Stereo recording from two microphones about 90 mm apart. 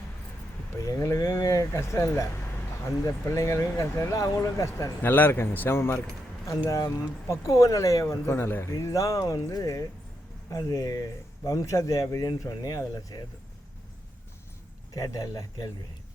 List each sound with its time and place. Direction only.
0.8 s a sound: 40° left (ahead or behind)
3.2 s speech: 35° left (ahead or behind)
5.0 s a man's voice: 20° left (ahead or behind)
6.7 s speech: 40° left (ahead or behind)
8.3 s a man's voice: 25° left (ahead or behind)
8.7 s speech: 40° left (ahead or behind)
14.9 s speech: 45° left (ahead or behind)